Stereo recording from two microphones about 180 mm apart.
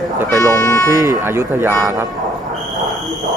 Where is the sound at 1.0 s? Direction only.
15° right (ahead or behind).